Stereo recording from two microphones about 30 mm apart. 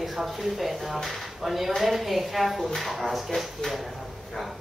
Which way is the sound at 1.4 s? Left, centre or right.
Centre.